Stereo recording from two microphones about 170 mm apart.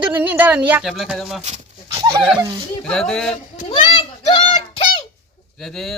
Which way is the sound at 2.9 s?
5° left (ahead or behind).